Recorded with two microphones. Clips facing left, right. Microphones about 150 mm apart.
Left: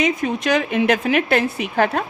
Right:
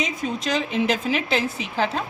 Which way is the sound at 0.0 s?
65° left (ahead or behind).